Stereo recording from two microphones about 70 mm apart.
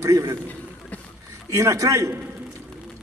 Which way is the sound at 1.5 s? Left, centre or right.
Right.